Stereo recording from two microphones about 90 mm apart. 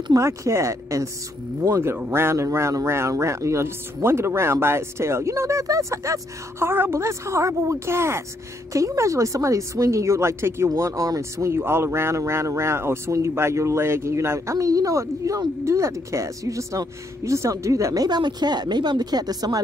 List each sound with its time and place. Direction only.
0.1 s speech: 35° right (ahead or behind)
18.0 s speech: 50° right (ahead or behind)